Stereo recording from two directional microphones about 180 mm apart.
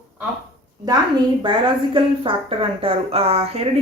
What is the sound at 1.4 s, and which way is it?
A woman's voice, 25° right (ahead or behind).